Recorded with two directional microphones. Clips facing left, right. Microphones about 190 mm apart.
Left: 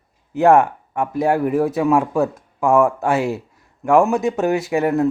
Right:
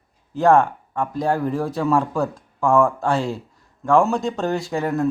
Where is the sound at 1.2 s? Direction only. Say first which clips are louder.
Left 4 dB; 10° left (ahead or behind).